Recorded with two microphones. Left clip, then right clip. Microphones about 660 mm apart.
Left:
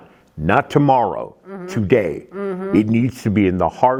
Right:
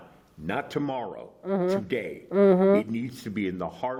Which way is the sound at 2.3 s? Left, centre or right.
Right.